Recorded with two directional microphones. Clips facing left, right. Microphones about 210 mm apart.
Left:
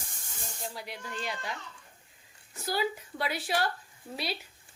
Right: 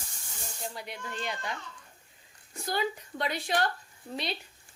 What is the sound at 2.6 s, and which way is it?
A woman's voice, 5° left (ahead or behind).